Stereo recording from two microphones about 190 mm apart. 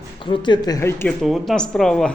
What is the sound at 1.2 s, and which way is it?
Speech, centre (ahead or behind).